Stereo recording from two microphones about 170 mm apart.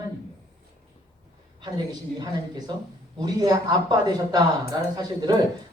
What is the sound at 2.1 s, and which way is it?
Speech, 25° right (ahead or behind).